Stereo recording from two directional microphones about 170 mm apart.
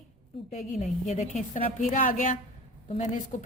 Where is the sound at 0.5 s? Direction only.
45° left (ahead or behind).